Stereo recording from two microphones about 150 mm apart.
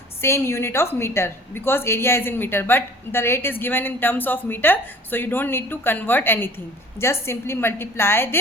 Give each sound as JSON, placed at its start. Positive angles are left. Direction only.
{"t": 0.2, "sound": "speech", "side_deg": 15}